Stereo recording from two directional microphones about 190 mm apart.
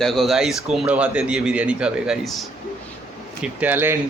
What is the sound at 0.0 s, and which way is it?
A man's voice, centre (ahead or behind).